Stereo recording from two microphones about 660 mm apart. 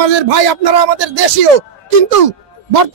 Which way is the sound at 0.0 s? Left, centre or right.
Right.